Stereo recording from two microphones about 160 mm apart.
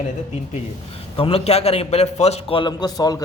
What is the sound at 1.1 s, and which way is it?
A man's voice, 35° left (ahead or behind).